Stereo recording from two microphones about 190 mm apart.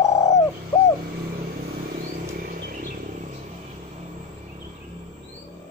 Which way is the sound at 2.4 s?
50° right (ahead or behind).